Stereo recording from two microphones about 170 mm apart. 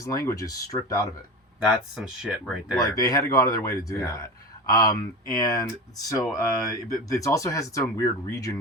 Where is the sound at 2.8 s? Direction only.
20° left (ahead or behind).